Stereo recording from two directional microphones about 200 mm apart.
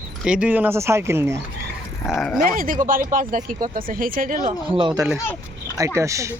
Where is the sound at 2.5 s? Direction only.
45° right (ahead or behind).